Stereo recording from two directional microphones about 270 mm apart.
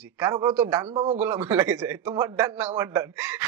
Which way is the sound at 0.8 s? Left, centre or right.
Right.